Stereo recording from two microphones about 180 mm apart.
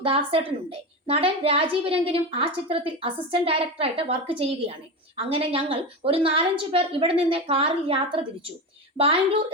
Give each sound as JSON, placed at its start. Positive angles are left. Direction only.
{"t": 0.0, "sound": "a woman's voice", "side_deg": -30}